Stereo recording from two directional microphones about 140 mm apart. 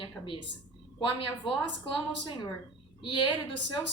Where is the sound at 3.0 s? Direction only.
35° left (ahead or behind).